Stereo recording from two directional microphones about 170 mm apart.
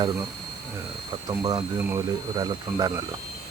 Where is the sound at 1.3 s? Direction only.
25° right (ahead or behind).